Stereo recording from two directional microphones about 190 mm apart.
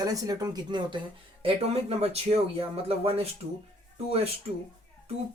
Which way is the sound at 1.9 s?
30° right (ahead or behind).